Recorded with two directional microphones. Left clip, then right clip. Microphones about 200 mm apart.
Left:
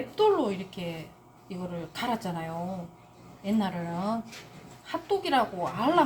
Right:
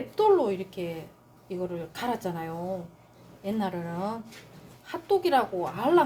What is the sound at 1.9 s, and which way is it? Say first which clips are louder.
A woman's voice: left 2 dB; 45° right (ahead or behind).